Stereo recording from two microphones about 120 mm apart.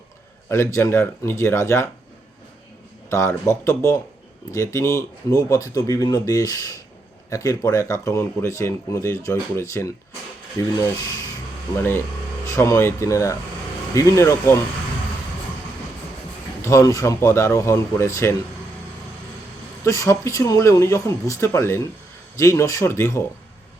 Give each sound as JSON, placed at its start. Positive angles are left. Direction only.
{"t": 0.4, "sound": "speech", "side_deg": 20}
{"t": 3.1, "sound": "speech", "side_deg": 25}
{"t": 12.5, "sound": "speech", "side_deg": 25}
{"t": 16.6, "sound": "speech", "side_deg": 25}
{"t": 19.8, "sound": "speech", "side_deg": 25}